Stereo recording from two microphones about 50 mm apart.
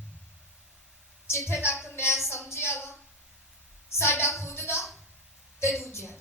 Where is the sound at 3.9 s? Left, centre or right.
Left.